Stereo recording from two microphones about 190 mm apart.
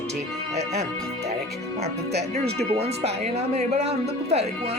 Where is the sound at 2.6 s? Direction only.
35° right (ahead or behind).